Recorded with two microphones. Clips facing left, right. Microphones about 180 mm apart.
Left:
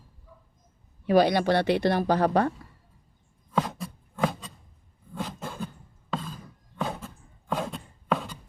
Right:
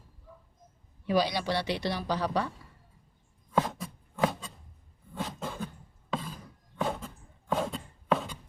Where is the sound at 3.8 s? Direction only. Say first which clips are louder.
Left 1 dB; centre (ahead or behind).